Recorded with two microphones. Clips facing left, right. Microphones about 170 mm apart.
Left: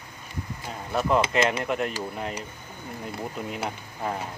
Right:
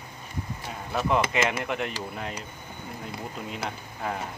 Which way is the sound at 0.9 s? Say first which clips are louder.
Left 2 dB; centre (ahead or behind).